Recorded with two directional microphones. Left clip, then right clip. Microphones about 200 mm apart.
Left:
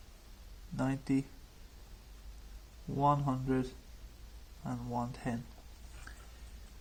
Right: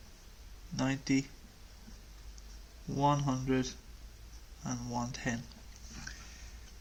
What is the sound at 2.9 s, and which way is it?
Speech, 20° left (ahead or behind).